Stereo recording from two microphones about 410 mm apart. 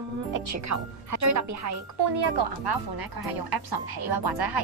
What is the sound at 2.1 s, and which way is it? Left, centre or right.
Speech, right.